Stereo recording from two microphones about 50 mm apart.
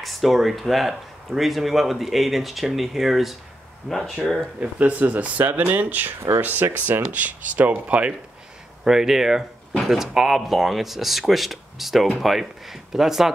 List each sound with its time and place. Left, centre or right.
0.0 s speech: centre
4.7 s speech: right
8.8 s speech: centre